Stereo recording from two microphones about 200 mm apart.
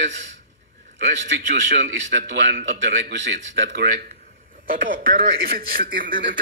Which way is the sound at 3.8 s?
50° right (ahead or behind).